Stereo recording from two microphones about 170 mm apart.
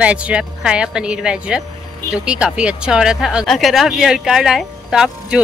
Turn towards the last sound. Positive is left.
turn(degrees=-5)  # may be behind; listen again after turning